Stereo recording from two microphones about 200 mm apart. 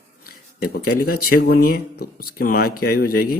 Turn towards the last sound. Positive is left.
turn(degrees=50)  # may be behind; listen again after turning